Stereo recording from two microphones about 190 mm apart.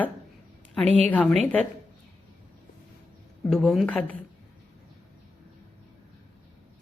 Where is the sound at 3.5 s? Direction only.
Centre (ahead or behind).